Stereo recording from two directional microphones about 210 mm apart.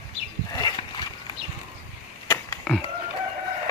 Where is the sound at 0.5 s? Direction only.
20° left (ahead or behind).